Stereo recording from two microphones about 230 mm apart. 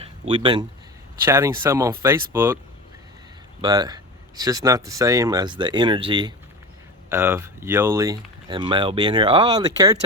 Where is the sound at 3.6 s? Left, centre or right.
Centre.